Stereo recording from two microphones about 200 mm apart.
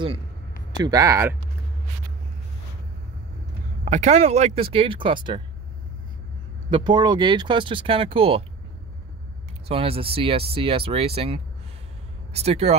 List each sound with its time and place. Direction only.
0.8 s speech: 15° right (ahead or behind)
3.8 s speech: 35° right (ahead or behind)
6.7 s speech: 20° right (ahead or behind)
9.7 s speech: 30° right (ahead or behind)